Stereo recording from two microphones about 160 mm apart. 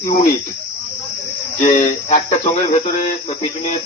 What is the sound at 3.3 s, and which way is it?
Speech, 35° left (ahead or behind).